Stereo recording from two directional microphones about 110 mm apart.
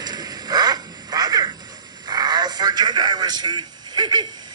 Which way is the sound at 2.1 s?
40° right (ahead or behind).